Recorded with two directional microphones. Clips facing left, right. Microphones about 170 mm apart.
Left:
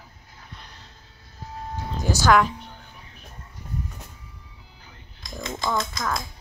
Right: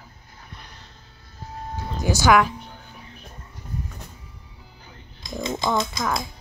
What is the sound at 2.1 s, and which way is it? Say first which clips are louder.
Speech: right 1 dB; 10° right (ahead or behind).